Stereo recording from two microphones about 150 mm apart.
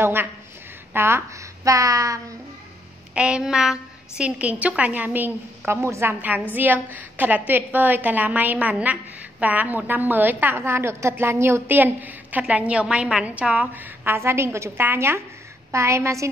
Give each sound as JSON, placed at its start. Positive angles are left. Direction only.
{"t": 0.0, "sound": "a woman's voice", "side_deg": -15}
{"t": 3.2, "sound": "a sound", "side_deg": -5}
{"t": 4.2, "sound": "a woman's voice", "side_deg": -10}